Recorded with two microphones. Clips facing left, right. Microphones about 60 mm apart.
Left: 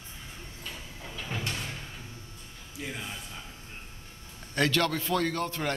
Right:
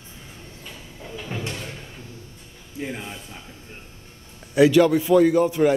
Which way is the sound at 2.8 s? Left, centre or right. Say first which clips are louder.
Right 6 dB; right.